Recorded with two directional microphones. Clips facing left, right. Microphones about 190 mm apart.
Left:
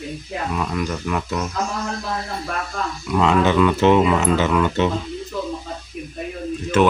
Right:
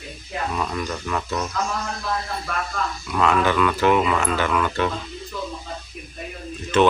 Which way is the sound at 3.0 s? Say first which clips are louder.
Left 3 dB; 20° left (ahead or behind).